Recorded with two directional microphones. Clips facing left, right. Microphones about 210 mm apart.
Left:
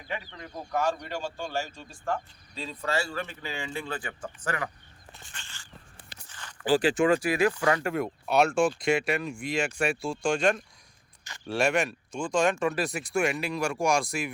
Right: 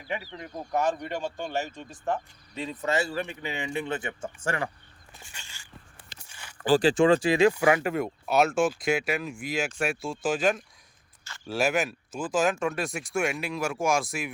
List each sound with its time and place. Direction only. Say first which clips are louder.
0.7 s speech: right 2 dB; 20° right (ahead or behind)
5.2 s a sound: right 2 dB; 10° right (ahead or behind)
6.7 s speech: right 2 dB; 35° right (ahead or behind)
7.5 s speech: right 3 dB; 10° right (ahead or behind)
7.9 s speech: right 1 dB; centre (ahead or behind)